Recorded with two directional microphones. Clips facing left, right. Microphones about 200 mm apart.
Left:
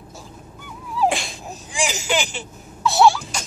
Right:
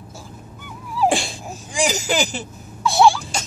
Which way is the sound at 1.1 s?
35° right (ahead or behind).